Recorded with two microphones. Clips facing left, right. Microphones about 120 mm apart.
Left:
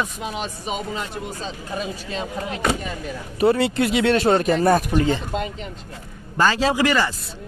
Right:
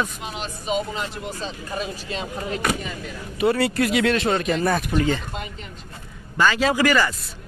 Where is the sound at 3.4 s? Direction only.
25° left (ahead or behind).